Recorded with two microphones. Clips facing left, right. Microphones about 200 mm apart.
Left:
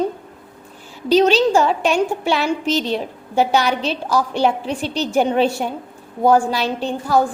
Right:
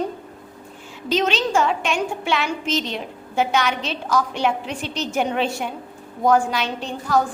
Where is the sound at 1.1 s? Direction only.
35° left (ahead or behind).